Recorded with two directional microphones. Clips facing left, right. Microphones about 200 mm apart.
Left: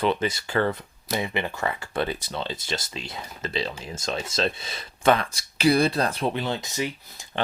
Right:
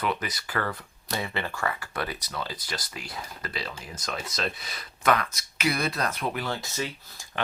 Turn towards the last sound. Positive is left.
turn(degrees=15)  # may be behind; listen again after turning